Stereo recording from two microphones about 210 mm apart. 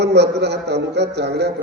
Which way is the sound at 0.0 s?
55° right (ahead or behind).